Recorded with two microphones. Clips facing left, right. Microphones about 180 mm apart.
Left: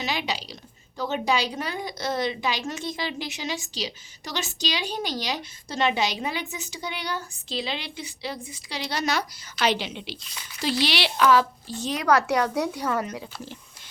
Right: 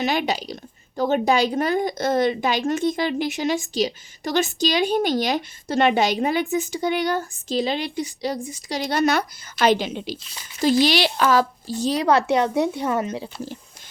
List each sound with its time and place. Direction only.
0.0 s a woman's voice: 50° right (ahead or behind); by 13.3 s 25° right (ahead or behind)